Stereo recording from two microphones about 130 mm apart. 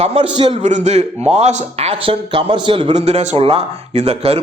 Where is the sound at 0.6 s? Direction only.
65° right (ahead or behind); by 2.9 s 40° right (ahead or behind).